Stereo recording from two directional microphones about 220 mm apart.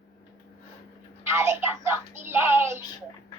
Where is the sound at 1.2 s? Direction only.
10° right (ahead or behind).